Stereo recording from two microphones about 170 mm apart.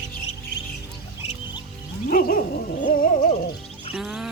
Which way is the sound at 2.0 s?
60° left (ahead or behind).